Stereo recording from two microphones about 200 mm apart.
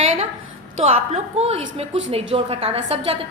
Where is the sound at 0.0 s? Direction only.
35° right (ahead or behind).